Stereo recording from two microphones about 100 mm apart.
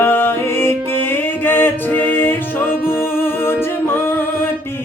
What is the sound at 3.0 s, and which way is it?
Singing, 25° left (ahead or behind).